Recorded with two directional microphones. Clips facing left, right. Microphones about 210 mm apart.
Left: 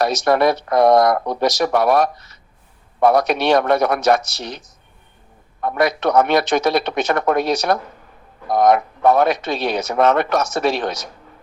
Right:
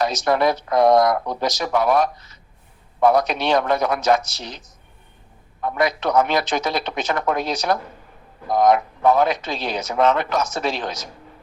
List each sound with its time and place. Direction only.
0.0 s speech: 65° left (ahead or behind)